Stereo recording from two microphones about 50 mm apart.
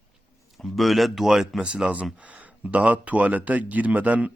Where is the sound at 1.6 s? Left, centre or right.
Right.